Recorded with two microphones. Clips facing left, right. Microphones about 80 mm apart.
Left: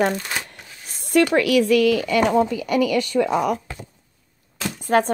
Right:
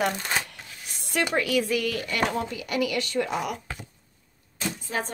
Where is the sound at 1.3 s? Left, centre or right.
Left.